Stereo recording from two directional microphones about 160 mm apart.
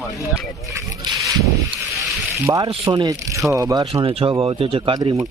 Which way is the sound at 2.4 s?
20° right (ahead or behind).